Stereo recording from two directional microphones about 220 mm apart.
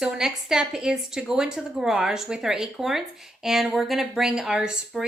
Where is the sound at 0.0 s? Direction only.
Centre (ahead or behind).